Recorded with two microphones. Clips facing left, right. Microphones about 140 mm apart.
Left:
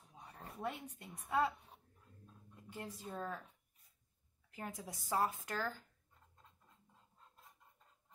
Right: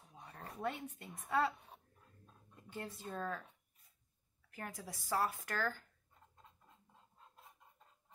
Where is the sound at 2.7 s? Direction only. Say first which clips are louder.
Right 1 dB; 10° left (ahead or behind).